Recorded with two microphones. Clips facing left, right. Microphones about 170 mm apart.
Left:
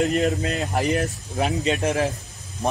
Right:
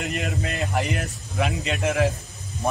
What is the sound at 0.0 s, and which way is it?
Speech, 40° left (ahead or behind).